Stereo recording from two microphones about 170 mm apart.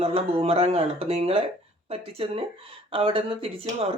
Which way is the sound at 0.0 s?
35° right (ahead or behind).